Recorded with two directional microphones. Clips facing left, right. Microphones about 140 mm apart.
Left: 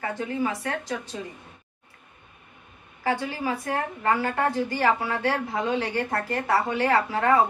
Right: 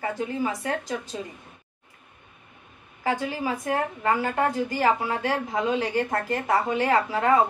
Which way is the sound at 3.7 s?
20° right (ahead or behind).